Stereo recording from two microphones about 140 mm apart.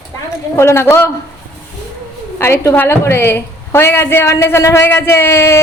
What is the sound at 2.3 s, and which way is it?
A woman's voice, 15° left (ahead or behind).